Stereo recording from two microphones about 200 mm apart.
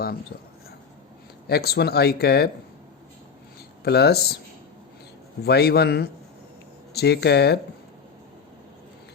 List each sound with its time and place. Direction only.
1.5 s speech: 50° left (ahead or behind)
3.8 s speech: 55° left (ahead or behind)
5.4 s speech: 55° left (ahead or behind)